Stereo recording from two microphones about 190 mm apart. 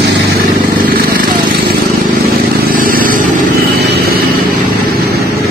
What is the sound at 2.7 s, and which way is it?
Vehicle, 45° right (ahead or behind).